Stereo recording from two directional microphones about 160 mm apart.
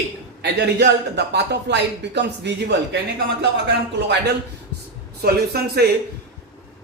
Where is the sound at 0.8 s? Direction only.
90° right.